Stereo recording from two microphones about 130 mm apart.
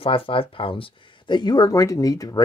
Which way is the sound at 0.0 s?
45° left (ahead or behind).